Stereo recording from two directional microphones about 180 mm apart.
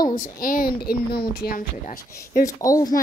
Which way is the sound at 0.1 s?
50° left (ahead or behind).